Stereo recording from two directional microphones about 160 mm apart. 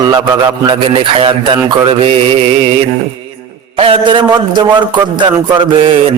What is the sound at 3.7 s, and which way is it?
A man's voice, 35° right (ahead or behind).